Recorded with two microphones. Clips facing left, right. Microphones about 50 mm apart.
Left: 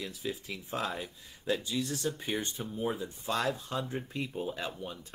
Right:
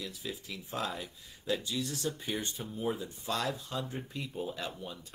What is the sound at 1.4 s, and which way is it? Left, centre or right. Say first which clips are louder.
Speech: left 2 dB; left.